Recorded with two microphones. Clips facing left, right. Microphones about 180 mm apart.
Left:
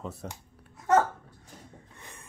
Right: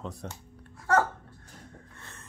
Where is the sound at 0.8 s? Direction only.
20° left (ahead or behind).